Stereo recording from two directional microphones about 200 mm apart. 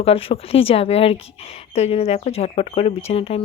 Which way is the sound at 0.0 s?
30° left (ahead or behind).